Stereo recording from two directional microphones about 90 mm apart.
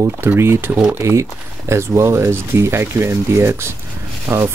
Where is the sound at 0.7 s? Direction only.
10° right (ahead or behind).